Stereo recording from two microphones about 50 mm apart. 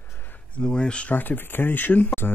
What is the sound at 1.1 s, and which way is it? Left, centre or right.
Speech, left.